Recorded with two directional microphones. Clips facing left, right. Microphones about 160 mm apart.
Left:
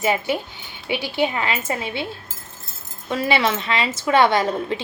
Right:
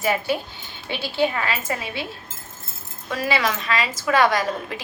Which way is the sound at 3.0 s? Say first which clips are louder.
Left 3 dB; 25° left (ahead or behind).